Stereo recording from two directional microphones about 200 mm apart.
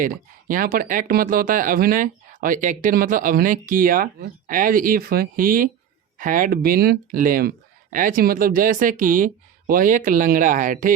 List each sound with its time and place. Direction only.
0.0 s speech: 45° right (ahead or behind)